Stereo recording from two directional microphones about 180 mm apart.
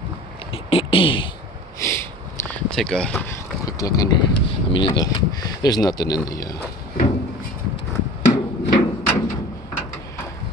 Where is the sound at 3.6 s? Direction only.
20° left (ahead or behind).